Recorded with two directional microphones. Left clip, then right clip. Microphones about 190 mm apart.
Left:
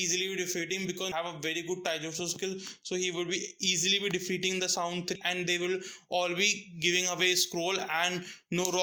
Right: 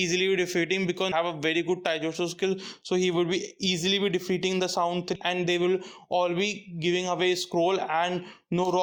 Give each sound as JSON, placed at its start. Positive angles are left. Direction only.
{"t": 0.0, "sound": "a man's voice", "side_deg": -45}